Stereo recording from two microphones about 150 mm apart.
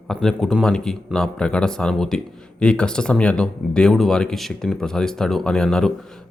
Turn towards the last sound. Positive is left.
turn(degrees=5)  # may be behind; listen again after turning